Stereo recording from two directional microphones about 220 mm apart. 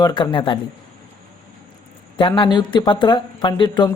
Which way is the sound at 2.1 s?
20° left (ahead or behind).